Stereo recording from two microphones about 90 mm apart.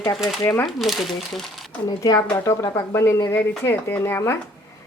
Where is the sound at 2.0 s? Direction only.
35° left (ahead or behind).